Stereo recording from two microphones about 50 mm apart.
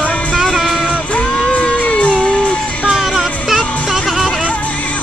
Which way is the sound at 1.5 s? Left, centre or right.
Left.